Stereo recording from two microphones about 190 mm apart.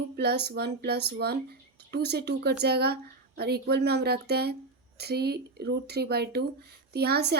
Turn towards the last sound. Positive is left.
turn(degrees=-60)  # may be behind; listen again after turning